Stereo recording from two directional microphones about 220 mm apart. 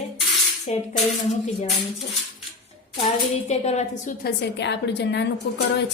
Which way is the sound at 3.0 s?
30° left (ahead or behind).